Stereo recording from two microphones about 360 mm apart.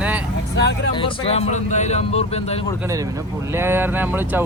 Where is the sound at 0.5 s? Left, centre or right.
Left.